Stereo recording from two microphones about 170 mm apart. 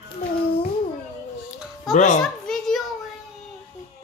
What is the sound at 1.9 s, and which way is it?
Speech, 45° left (ahead or behind).